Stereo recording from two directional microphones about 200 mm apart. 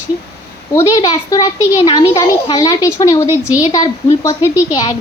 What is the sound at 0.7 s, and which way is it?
A woman's voice, 15° left (ahead or behind).